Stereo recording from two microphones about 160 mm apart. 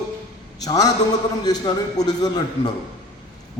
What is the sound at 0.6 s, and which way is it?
Speech, 25° left (ahead or behind).